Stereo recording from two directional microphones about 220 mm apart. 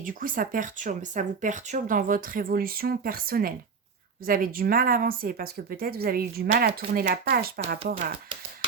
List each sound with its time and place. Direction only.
0.0 s a woman's voice: 40° right (ahead or behind)